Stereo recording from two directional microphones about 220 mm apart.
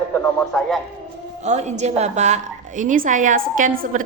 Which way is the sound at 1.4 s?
30° right (ahead or behind).